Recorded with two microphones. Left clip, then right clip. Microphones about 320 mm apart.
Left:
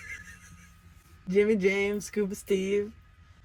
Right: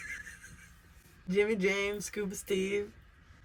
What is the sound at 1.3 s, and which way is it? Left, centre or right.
Speech, centre.